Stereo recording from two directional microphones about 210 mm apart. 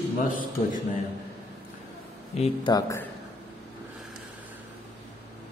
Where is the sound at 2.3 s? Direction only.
30° left (ahead or behind).